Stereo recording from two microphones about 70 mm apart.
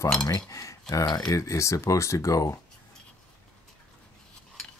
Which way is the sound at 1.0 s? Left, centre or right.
Left.